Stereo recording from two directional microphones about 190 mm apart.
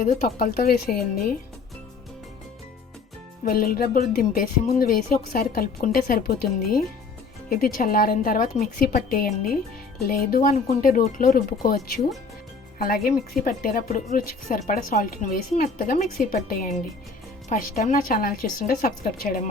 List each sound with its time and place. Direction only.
0.0 s a woman's voice: 50° left (ahead or behind)
3.4 s a woman's voice: 50° left (ahead or behind)
12.8 s a woman's voice: 50° left (ahead or behind)